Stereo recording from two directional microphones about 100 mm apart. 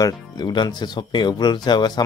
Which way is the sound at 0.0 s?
45° left (ahead or behind).